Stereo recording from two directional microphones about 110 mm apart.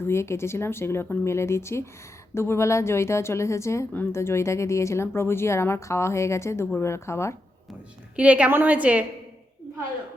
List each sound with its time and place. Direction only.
0.0 s a woman's voice: 25° left (ahead or behind)
8.1 s a woman's voice: 10° right (ahead or behind)